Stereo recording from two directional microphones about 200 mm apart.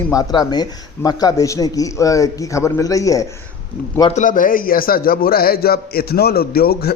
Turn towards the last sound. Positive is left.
turn(degrees=50)  # may be behind; listen again after turning